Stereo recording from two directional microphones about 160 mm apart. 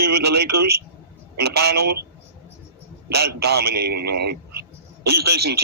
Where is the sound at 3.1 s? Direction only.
90° right.